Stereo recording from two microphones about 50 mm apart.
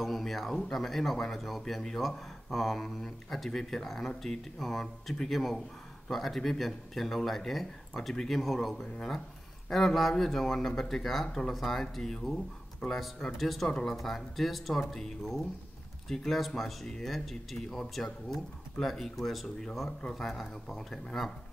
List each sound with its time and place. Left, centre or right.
0.0 s speech: centre